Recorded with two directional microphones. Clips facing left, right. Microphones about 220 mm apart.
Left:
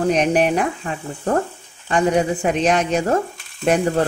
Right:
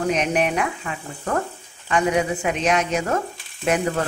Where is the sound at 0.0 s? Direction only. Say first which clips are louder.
Left 4 dB; 35° left (ahead or behind).